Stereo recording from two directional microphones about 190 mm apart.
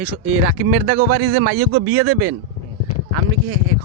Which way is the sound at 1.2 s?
70° right (ahead or behind).